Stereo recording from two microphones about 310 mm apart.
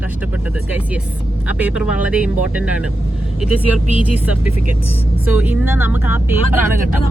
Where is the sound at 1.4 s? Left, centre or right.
Centre.